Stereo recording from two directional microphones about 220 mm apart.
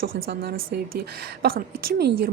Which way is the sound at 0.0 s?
45° right (ahead or behind).